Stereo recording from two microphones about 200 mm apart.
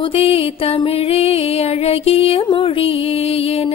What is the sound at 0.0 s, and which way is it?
Music, 30° left (ahead or behind).